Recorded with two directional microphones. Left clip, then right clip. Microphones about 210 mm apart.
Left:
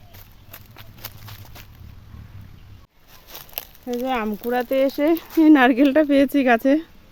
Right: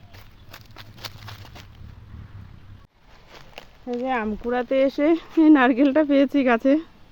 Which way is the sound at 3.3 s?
35° left (ahead or behind).